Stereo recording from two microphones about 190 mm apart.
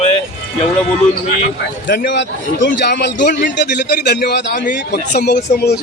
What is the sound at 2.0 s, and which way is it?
A man's voice, 70° left (ahead or behind).